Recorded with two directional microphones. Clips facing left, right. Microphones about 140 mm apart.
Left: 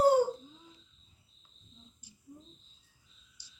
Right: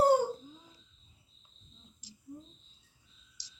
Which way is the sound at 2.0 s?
90° right.